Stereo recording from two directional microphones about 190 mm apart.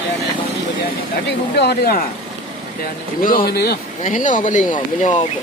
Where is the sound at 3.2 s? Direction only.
50° left (ahead or behind).